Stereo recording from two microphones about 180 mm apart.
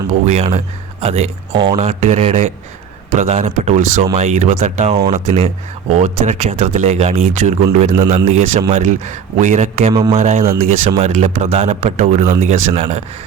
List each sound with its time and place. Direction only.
0.3 s speech: 35° right (ahead or behind)
1.8 s speech: 40° right (ahead or behind)
9.9 s speech: 20° right (ahead or behind)
10.2 s speech: 40° right (ahead or behind)